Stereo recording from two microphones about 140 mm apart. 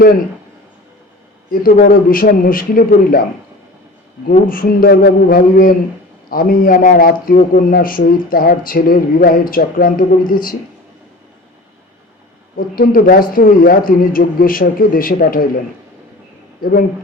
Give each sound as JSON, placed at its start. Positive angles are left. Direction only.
{"t": 1.5, "sound": "speech", "side_deg": 90}
{"t": 4.4, "sound": "speech", "side_deg": 90}
{"t": 12.5, "sound": "speech", "side_deg": 90}